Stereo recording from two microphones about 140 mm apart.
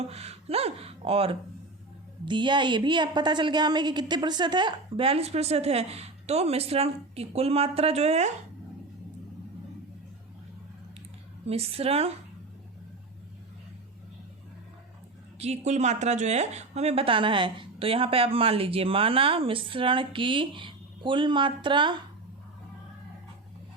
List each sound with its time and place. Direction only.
0.1 s a woman's voice: 50° right (ahead or behind)
11.4 s a woman's voice: 45° right (ahead or behind)
15.4 s speech: 50° right (ahead or behind); by 21.9 s 35° right (ahead or behind)